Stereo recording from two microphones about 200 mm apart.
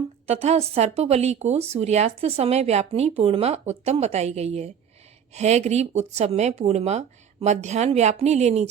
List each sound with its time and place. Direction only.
0.3 s speech: 30° right (ahead or behind)